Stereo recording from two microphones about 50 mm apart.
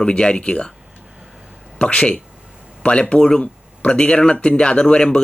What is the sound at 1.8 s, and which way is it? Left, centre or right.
Speech, left.